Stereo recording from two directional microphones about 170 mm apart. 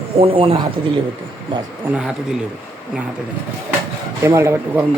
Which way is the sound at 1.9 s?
5° right (ahead or behind).